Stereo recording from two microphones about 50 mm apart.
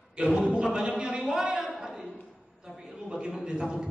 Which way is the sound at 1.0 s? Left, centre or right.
Centre.